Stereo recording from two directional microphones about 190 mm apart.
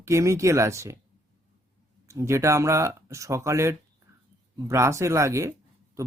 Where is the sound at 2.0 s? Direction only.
15° right (ahead or behind).